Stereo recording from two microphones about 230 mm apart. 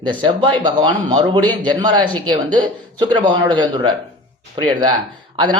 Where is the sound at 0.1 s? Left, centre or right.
Right.